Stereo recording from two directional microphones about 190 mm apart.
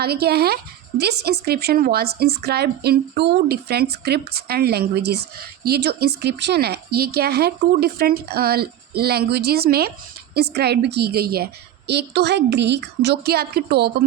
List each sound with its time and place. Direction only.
0.0 s speech: 55° right (ahead or behind)